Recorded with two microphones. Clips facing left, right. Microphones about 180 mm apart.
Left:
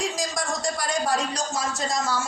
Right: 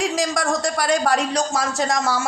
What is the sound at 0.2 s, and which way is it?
A woman's voice, 70° right (ahead or behind).